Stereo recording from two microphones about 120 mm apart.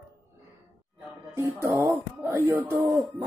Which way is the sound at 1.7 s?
20° right (ahead or behind).